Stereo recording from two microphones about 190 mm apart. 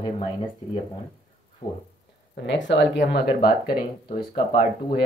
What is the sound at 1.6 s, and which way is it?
Speech, 35° left (ahead or behind).